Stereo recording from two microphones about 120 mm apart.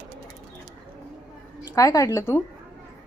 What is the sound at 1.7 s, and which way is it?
Speech, 25° left (ahead or behind).